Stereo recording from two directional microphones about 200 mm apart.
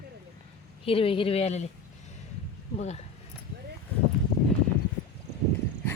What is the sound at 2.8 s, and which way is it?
Speech, 35° left (ahead or behind).